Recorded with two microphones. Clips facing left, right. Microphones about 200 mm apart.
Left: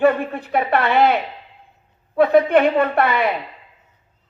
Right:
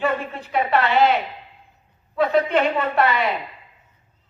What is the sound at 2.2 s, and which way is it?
Speech, 55° left (ahead or behind).